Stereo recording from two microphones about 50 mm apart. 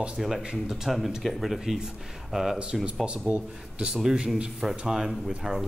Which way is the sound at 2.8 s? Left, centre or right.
Centre.